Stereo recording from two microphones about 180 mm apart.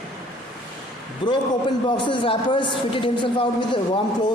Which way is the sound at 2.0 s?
25° left (ahead or behind).